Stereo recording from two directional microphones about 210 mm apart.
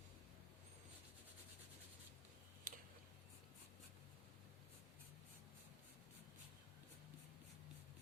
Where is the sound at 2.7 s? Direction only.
40° right (ahead or behind).